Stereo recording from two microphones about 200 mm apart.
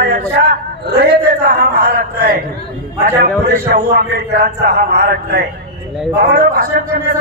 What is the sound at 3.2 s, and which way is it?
A man's voice, 50° right (ahead or behind).